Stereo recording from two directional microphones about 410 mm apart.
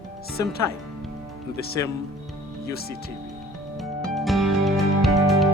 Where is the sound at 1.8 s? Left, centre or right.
Centre.